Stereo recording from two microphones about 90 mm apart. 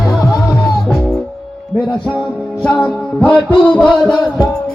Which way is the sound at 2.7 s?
20° left (ahead or behind).